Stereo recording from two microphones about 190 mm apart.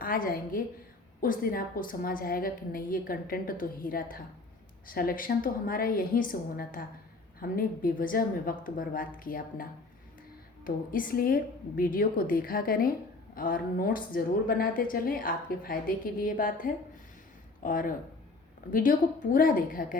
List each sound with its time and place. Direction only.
0.0 s a woman's voice: 50° left (ahead or behind)